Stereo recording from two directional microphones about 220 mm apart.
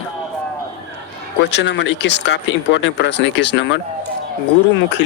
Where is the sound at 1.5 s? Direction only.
50° left (ahead or behind).